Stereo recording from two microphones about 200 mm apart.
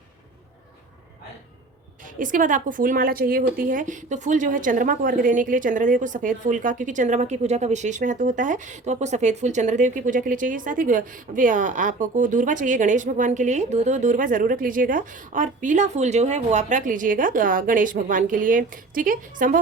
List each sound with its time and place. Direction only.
2.1 s a woman's voice: 40° right (ahead or behind)